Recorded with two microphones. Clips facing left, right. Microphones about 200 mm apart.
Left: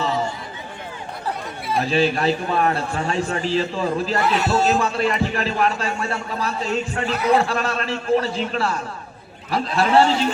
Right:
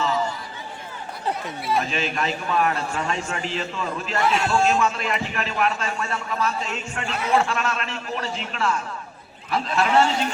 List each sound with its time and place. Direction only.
1.8 s a man's voice: 35° left (ahead or behind)
4.2 s speech: centre (ahead or behind)
4.6 s a man's voice: 35° left (ahead or behind)